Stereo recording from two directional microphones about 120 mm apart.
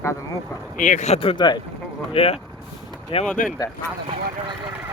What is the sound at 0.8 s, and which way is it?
Speech, 85° left.